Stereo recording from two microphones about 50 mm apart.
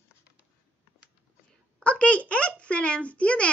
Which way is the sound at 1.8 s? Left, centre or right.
Left.